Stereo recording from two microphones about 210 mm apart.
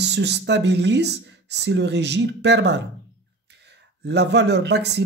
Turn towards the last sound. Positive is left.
turn(degrees=-55)  # may be behind; listen again after turning